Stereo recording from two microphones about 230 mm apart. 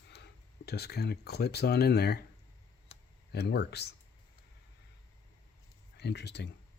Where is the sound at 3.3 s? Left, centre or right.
Left.